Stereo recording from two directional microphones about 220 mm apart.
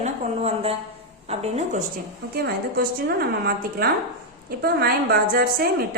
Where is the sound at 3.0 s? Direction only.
45° right (ahead or behind).